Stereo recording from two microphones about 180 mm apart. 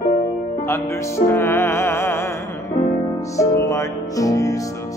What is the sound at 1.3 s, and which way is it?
Music, 10° left (ahead or behind).